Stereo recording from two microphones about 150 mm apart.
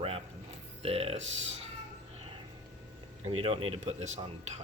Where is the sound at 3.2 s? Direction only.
40° right (ahead or behind).